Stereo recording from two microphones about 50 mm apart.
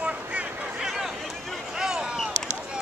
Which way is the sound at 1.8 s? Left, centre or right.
Centre.